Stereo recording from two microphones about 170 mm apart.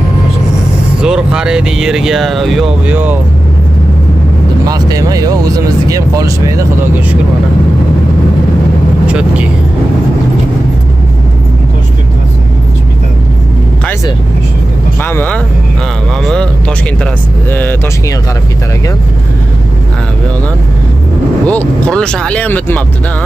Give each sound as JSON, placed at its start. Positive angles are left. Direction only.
{"t": 1.0, "sound": "speech", "side_deg": -5}
{"t": 4.6, "sound": "speech", "side_deg": -20}
{"t": 9.0, "sound": "speech", "side_deg": -5}
{"t": 15.0, "sound": "speech", "side_deg": 10}
{"t": 17.0, "sound": "speech", "side_deg": 10}
{"t": 21.5, "sound": "speech", "side_deg": 5}